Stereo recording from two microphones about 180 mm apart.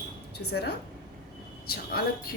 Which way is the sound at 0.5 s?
65° left (ahead or behind).